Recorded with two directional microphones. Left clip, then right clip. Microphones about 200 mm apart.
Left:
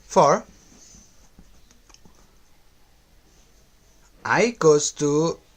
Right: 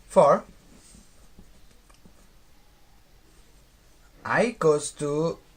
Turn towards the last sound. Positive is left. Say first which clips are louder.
# left 5 dB
turn(degrees=40)  # may be behind; listen again after turning